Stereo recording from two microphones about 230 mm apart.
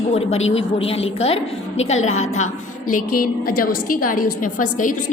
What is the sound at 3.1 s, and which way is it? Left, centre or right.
A woman's voice, left.